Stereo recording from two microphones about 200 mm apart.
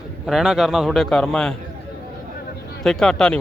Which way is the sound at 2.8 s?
5° left (ahead or behind).